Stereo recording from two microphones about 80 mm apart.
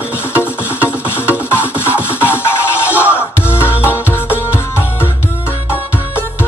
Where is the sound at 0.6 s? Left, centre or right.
Left.